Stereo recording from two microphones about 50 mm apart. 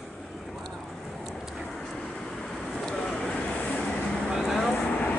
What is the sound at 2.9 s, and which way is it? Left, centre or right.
Vehicle, centre.